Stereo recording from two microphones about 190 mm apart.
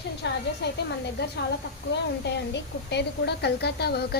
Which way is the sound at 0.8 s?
60° left (ahead or behind).